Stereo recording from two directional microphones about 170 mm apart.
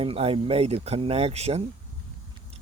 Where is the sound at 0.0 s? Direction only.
35° right (ahead or behind).